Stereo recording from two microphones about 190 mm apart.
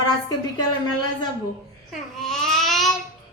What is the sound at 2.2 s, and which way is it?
Babbling, 5° left (ahead or behind).